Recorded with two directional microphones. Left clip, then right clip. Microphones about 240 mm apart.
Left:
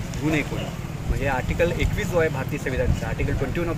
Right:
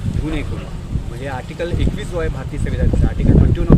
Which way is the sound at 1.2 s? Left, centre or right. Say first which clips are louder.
Left 2 dB; centre.